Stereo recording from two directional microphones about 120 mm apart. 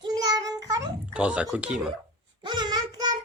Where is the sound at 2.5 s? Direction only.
35° right (ahead or behind).